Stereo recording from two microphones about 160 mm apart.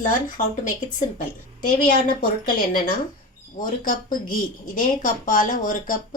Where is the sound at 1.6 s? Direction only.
65° left (ahead or behind).